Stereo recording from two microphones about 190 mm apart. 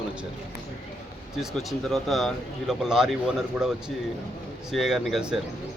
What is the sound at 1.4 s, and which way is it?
Speech, centre (ahead or behind).